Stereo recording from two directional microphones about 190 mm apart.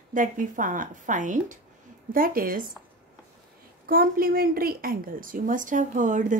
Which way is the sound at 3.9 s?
50° right (ahead or behind).